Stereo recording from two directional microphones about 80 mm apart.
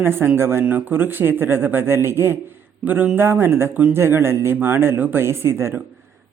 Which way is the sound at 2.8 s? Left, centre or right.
Centre.